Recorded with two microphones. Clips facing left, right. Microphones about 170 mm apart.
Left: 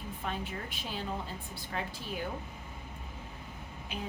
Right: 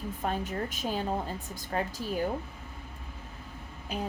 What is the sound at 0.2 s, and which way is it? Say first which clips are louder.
A woman's voice: right 6 dB; 45° right (ahead or behind).